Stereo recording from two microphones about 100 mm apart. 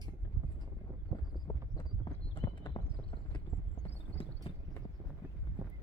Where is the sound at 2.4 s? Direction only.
40° left (ahead or behind).